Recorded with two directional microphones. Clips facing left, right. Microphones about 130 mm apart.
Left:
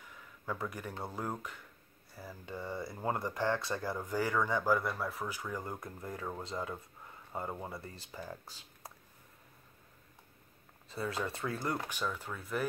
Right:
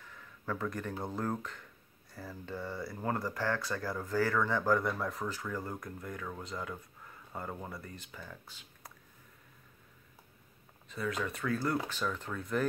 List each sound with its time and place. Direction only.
0.0 s a sound: 10° left (ahead or behind)
1.0 s speech: 10° left (ahead or behind); by 8.9 s 35° left (ahead or behind)
10.9 s speech: 30° left (ahead or behind)
11.9 s speech: 10° left (ahead or behind)